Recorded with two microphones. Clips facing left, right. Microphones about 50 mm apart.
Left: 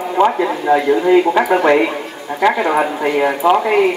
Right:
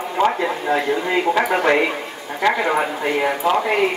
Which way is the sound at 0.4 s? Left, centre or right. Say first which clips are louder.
Left 5 dB; centre.